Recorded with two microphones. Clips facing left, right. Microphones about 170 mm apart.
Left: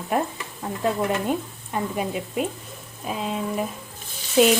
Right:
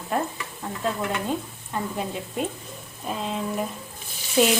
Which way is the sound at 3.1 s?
Centre (ahead or behind).